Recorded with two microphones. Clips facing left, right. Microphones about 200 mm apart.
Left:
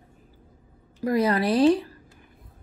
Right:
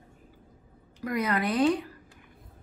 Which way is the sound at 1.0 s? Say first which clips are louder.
Left 6 dB; 30° left (ahead or behind).